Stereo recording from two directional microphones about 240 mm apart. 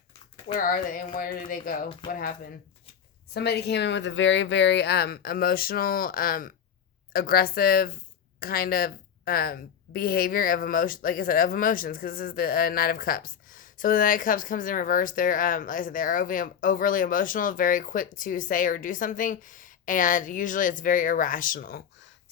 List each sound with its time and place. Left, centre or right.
0.5 s a woman's voice: left